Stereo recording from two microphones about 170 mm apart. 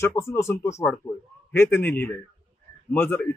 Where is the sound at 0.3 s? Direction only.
15° left (ahead or behind).